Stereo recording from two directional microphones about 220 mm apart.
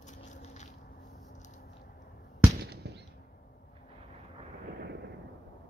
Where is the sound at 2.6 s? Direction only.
50° right (ahead or behind).